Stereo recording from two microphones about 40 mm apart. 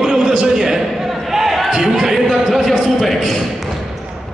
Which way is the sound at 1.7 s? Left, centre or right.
Centre.